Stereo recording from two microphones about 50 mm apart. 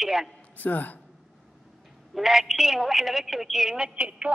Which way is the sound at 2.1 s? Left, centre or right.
Centre.